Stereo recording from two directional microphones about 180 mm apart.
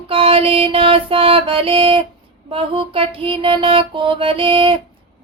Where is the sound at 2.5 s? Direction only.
30° right (ahead or behind).